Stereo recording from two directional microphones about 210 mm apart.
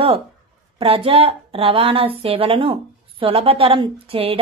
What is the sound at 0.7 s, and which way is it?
A woman's voice, 25° right (ahead or behind).